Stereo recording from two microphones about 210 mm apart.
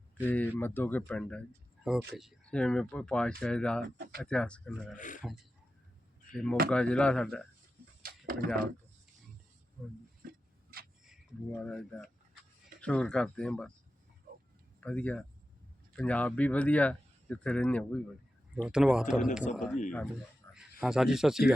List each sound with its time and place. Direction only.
0.3 s speech: 10° left (ahead or behind)
3.8 s speech: 45° right (ahead or behind)
4.2 s speech: 5° left (ahead or behind)
4.9 s a man's voice: 35° left (ahead or behind)
6.3 s speech: 5° left (ahead or behind)
8.0 s a sound: 45° right (ahead or behind)
10.2 s tick-tock: 45° right (ahead or behind)
11.5 s speech: 5° left (ahead or behind)
14.8 s speech: 5° left (ahead or behind)
20.4 s a sound: 15° left (ahead or behind)
20.8 s speech: 5° right (ahead or behind)